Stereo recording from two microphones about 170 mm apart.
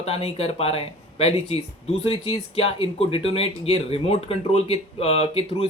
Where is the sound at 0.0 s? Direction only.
35° left (ahead or behind).